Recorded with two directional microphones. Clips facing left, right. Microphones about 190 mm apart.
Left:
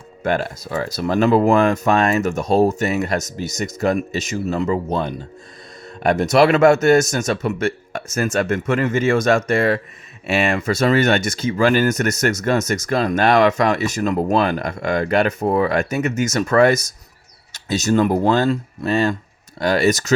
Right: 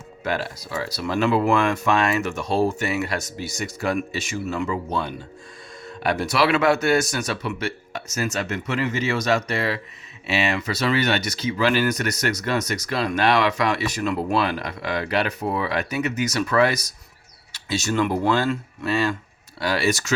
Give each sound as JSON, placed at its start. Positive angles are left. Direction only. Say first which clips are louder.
{"t": 0.2, "sound": "speech", "louder": "left 6 dB", "side_deg": 50}